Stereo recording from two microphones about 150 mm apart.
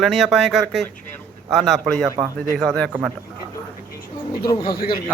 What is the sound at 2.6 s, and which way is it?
Speech, 5° left (ahead or behind).